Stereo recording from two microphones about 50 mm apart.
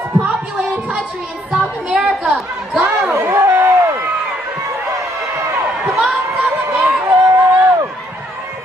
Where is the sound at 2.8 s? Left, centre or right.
Right.